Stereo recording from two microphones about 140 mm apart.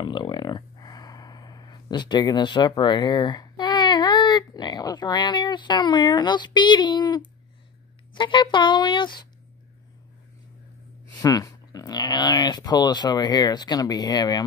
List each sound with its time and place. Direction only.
0.0 s speech: 35° left (ahead or behind)
11.1 s speech: 25° left (ahead or behind)